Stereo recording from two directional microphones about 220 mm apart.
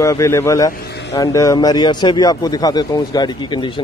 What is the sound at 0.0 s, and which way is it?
Speech, 15° left (ahead or behind).